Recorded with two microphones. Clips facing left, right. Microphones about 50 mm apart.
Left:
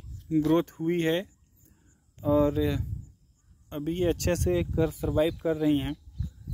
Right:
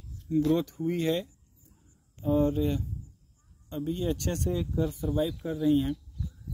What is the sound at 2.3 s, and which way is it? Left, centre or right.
Speech, left.